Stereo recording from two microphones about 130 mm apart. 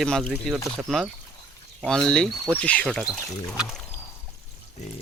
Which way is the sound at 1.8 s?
5° left (ahead or behind).